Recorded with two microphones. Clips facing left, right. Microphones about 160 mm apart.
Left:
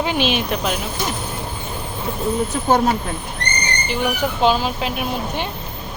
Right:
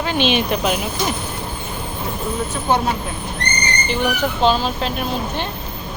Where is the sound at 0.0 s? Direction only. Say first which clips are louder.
Even; 15° left (ahead or behind).